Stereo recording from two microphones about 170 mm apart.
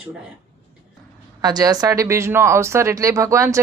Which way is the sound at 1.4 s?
25° right (ahead or behind).